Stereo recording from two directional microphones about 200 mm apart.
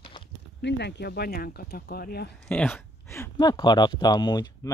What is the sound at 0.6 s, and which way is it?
Speech, 55° left (ahead or behind).